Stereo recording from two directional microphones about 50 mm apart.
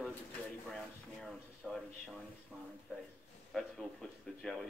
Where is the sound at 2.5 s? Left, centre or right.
Right.